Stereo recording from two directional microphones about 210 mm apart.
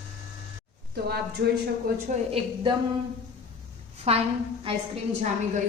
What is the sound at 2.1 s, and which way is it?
Speech, 35° right (ahead or behind).